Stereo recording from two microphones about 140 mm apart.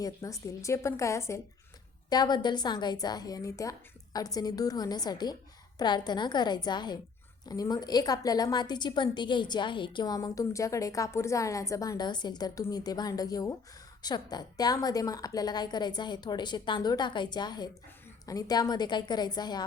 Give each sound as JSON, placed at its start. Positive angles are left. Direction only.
{"t": 0.0, "sound": "a woman's voice", "side_deg": 20}